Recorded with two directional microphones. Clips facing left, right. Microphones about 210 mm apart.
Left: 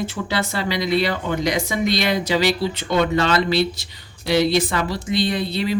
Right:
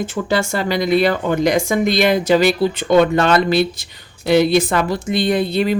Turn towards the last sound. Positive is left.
turn(degrees=-50)  # may be behind; listen again after turning